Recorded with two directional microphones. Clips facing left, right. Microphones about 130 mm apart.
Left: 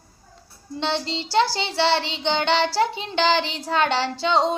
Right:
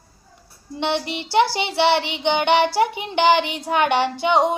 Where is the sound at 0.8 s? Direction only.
15° right (ahead or behind).